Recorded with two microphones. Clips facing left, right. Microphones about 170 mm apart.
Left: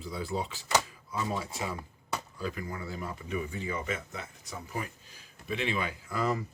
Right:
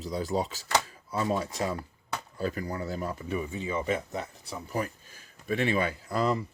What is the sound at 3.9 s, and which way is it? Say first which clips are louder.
Speech: right 6 dB; 35° right (ahead or behind).